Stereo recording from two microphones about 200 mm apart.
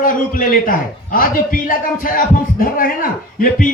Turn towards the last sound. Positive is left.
turn(degrees=45)  # may be behind; listen again after turning